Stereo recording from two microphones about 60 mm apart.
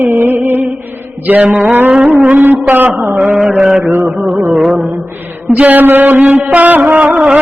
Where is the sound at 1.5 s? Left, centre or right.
Right.